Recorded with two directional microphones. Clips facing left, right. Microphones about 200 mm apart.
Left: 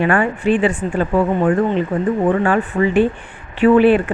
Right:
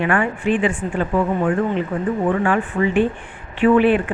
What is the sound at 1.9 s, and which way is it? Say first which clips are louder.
Speech: left 3 dB; 35° left (ahead or behind).